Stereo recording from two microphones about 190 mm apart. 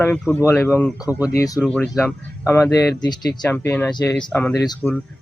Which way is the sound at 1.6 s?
5° left (ahead or behind).